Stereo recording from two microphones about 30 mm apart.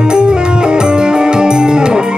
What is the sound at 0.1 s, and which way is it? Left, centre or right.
Music, right.